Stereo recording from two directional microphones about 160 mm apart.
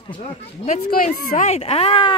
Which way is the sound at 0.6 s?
55° left (ahead or behind).